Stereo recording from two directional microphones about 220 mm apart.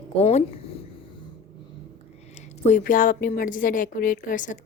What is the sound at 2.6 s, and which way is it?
A woman's voice, 35° left (ahead or behind).